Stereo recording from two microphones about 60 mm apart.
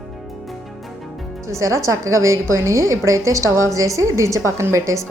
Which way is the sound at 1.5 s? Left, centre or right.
Right.